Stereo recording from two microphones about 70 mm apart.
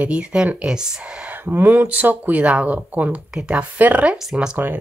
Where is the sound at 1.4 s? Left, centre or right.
Right.